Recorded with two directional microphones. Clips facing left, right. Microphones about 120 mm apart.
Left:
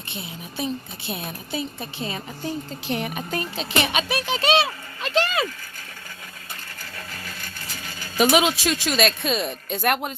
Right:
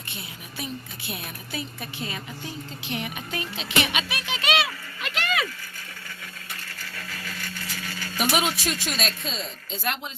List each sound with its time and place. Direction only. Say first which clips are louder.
0.1 s speech: left 6 dB; 25° left (ahead or behind)
8.2 s a woman's voice: left 6 dB; 90° left; by 10.1 s 55° left (ahead or behind)